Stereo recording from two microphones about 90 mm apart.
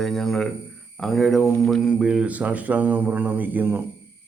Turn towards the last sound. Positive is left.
turn(degrees=-20)  # may be behind; listen again after turning